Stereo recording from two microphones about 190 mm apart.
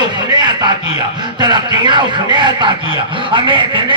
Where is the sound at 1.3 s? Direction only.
25° right (ahead or behind).